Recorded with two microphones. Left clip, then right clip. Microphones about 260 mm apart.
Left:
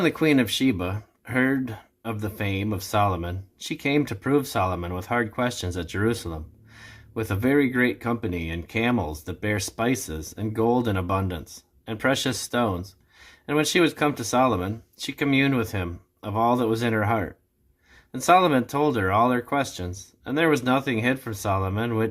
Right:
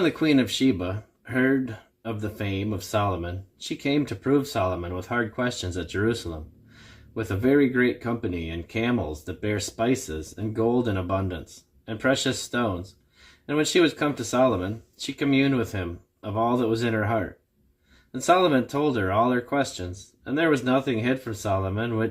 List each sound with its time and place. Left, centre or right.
0.0 s speech: left